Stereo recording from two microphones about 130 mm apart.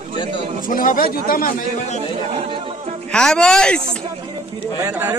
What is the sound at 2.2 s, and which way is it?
Speech, 50° right (ahead or behind).